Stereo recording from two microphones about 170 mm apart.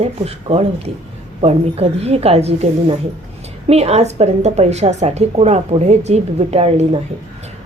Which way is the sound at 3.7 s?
40° right (ahead or behind).